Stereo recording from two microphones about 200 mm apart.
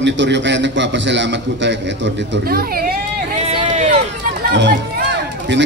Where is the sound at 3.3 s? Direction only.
35° right (ahead or behind).